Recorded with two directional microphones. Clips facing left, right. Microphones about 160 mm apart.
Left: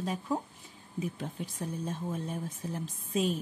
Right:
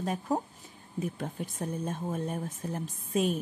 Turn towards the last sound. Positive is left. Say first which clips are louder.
# right 2 dB
turn(degrees=-50)  # may be behind; listen again after turning